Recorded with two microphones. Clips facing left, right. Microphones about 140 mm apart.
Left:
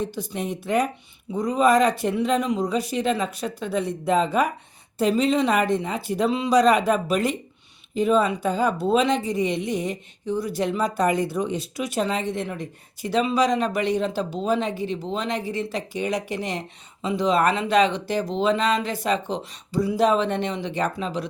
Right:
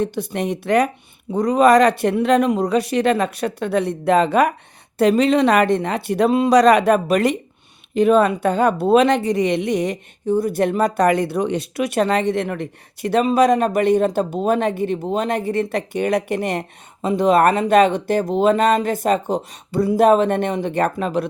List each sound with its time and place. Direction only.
0.0 s speech: 65° right (ahead or behind)
10.2 s speech: 50° right (ahead or behind)